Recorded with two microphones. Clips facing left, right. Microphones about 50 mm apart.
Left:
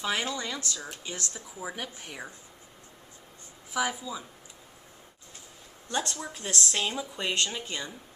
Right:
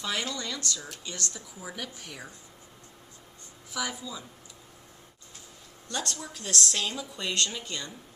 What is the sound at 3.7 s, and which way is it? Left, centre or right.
Speech, centre.